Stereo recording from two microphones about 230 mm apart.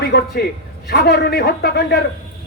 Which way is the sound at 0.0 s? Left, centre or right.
Left.